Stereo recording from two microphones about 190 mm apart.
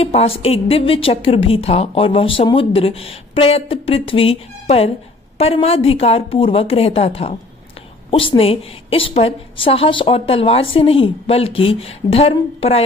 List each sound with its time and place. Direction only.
0.0 s a woman's voice: 30° left (ahead or behind)